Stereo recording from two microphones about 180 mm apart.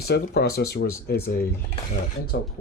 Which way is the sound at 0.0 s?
65° left (ahead or behind).